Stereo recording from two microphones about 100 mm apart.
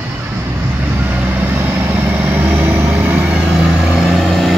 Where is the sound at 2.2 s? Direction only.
15° right (ahead or behind).